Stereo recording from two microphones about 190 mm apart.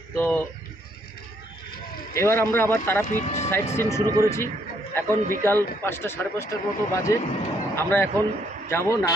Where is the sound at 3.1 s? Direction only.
35° left (ahead or behind).